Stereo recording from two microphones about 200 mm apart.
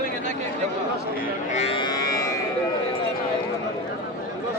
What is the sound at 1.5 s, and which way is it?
Music, 30° left (ahead or behind).